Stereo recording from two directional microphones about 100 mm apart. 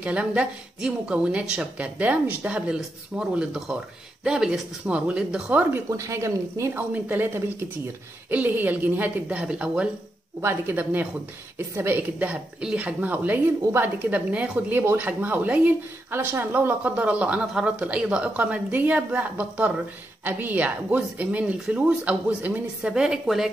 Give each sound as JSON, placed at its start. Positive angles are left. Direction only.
{"t": 0.0, "sound": "a woman's voice", "side_deg": -10}
{"t": 5.9, "sound": "a woman's voice", "side_deg": -30}
{"t": 10.4, "sound": "a woman's voice", "side_deg": -20}